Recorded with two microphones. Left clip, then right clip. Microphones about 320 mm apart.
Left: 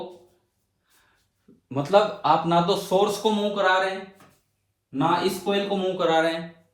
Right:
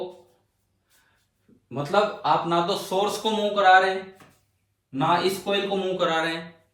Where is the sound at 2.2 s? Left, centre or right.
Left.